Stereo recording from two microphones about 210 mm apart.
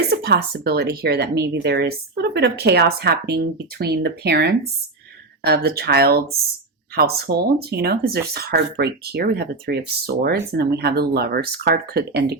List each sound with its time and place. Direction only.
0.1 s speech: 50° right (ahead or behind)